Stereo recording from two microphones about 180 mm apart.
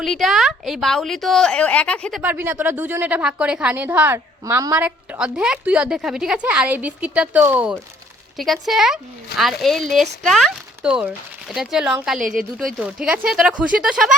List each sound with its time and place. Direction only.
0.0 s a woman's voice: centre (ahead or behind); by 4.9 s 15° right (ahead or behind)
4.9 s a woman's voice: 5° right (ahead or behind)
12.2 s a woman's voice: 50° right (ahead or behind)
12.5 s a woman's voice: centre (ahead or behind)